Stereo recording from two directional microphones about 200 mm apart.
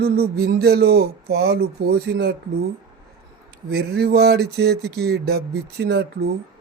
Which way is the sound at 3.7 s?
55° right (ahead or behind).